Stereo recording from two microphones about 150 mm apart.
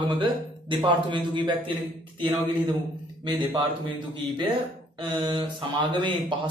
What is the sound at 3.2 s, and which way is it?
Speech, 35° right (ahead or behind).